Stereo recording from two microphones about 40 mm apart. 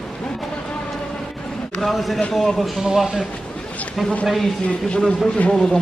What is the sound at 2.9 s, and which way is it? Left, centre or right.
Speech, centre.